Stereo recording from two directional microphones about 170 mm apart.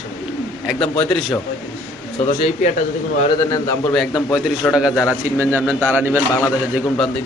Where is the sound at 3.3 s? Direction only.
20° left (ahead or behind).